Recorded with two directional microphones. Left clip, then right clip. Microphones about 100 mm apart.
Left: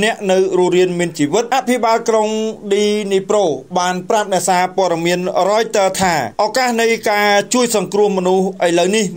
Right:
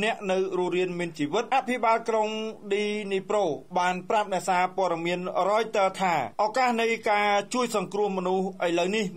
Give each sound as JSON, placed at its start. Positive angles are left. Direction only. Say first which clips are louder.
{"t": 0.0, "sound": "a man's voice", "louder": "left 12 dB", "side_deg": 25}